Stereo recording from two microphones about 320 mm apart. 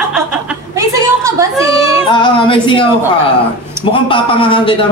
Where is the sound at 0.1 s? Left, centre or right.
Centre.